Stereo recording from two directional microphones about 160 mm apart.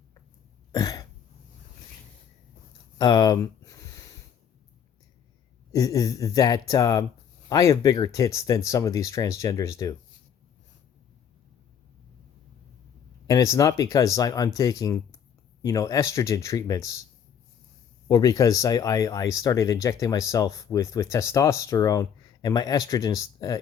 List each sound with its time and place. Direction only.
0.7 s cough: 25° left (ahead or behind)
3.0 s a sound: 25° left (ahead or behind)
5.7 s speech: 20° left (ahead or behind)
13.2 s speech: 20° left (ahead or behind)
18.1 s speech: 25° left (ahead or behind)